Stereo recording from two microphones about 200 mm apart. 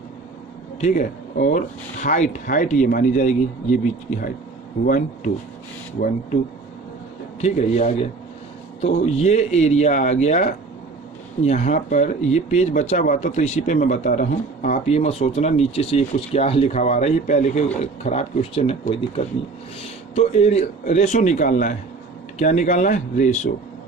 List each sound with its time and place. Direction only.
0.8 s speech: 40° left (ahead or behind)
7.4 s speech: 40° left (ahead or behind)
9.1 s speech: 35° left (ahead or behind)